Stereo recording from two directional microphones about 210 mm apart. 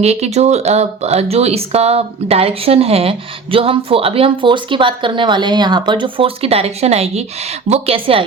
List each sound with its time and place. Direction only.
0.0 s speech: 30° right (ahead or behind)